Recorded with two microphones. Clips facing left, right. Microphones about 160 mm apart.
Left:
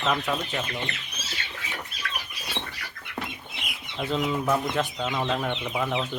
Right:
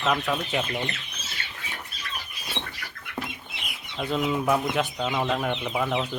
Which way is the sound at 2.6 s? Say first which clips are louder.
Even; 15° left (ahead or behind).